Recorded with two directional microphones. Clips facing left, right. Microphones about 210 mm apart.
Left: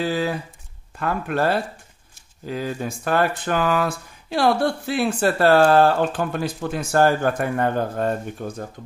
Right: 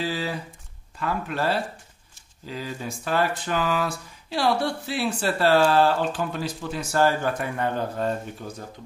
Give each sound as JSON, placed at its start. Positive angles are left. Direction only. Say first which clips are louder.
{"t": 0.0, "sound": "speech", "louder": "left 5 dB", "side_deg": 55}